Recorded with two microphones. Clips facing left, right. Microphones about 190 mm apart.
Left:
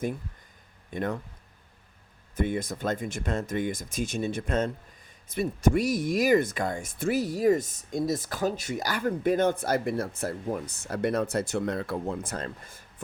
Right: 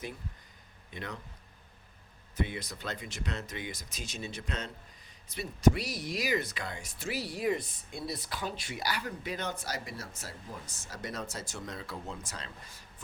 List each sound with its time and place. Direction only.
0.9 s speech: 50° left (ahead or behind)
2.3 s speech: 50° left (ahead or behind)